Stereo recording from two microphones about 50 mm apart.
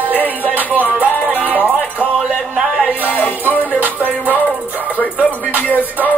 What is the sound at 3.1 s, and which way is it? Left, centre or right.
Music, left.